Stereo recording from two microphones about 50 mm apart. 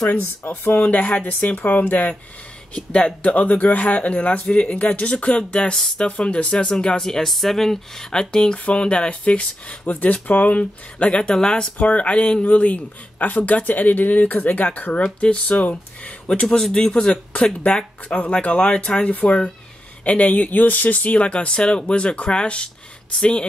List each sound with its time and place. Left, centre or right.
0.7 s speech: left
2.7 s speech: left
10.6 s speech: left
16.4 s speech: centre